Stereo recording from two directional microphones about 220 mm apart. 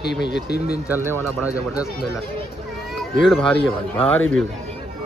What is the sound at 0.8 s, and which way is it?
Speech, 10° right (ahead or behind).